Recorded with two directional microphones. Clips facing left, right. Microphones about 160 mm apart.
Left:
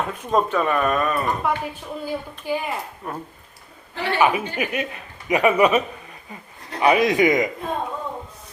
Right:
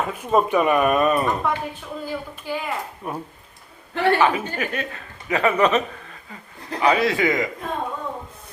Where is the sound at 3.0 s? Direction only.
10° right (ahead or behind).